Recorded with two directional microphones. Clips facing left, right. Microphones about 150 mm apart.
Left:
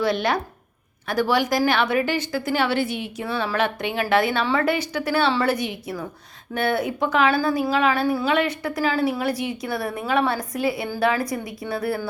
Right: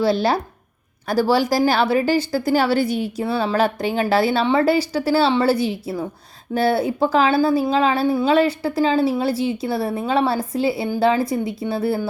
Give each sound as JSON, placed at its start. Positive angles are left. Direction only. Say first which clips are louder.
{"t": 0.0, "sound": "a woman's voice", "louder": "right 4 dB", "side_deg": -30}